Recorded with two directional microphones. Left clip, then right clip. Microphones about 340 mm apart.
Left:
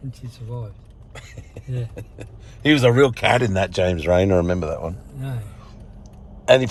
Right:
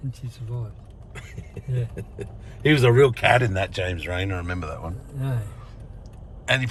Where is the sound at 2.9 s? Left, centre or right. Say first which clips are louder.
Left 1 dB; centre.